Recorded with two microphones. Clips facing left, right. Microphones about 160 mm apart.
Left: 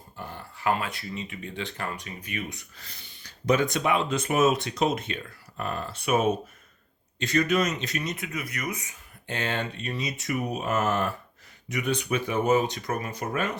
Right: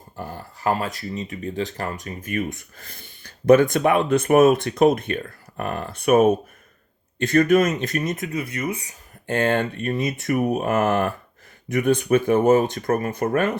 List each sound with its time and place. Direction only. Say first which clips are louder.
0.2 s speech: right 5 dB; 40° right (ahead or behind)
8.3 s speech: right 7 dB; 30° right (ahead or behind)
9.2 s speech: right 9 dB; 50° right (ahead or behind)